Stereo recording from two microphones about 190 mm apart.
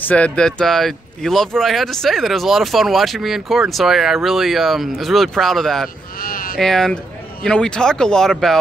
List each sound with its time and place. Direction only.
0.1 s speech: 5° left (ahead or behind)
6.2 s speech: 50° left (ahead or behind)
6.6 s speech: centre (ahead or behind)